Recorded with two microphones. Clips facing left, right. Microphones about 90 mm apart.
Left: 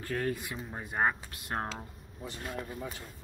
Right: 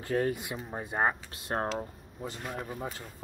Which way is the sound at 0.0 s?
25° right (ahead or behind).